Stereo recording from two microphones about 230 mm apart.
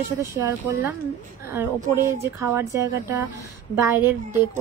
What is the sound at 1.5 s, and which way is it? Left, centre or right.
A woman's voice, centre.